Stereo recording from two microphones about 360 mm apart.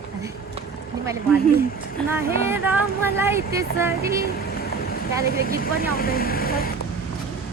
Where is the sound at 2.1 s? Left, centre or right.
Centre.